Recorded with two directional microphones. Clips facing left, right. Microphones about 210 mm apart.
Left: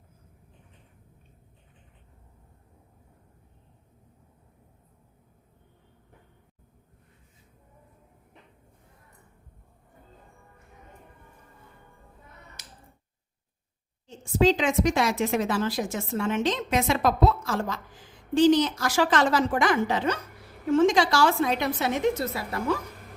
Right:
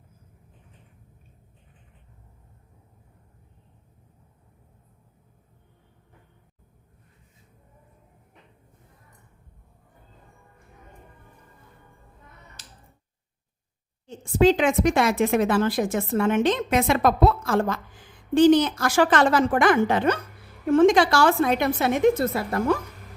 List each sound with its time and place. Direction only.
14.3 s a woman's voice: 55° right (ahead or behind)